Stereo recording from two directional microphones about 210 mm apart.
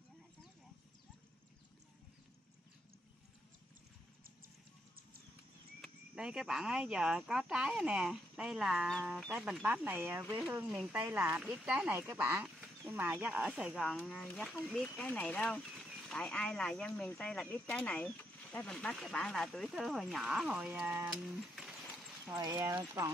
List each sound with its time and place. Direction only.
5.8 s speech: centre (ahead or behind)
22.4 s speech: 15° right (ahead or behind)